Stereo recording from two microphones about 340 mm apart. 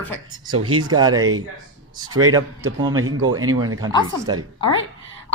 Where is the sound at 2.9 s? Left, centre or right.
Right.